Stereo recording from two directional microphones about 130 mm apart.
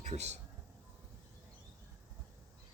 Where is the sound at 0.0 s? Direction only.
60° right (ahead or behind).